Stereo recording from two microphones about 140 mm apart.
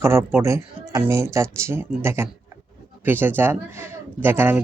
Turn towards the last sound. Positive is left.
turn(degrees=-15)  # may be behind; listen again after turning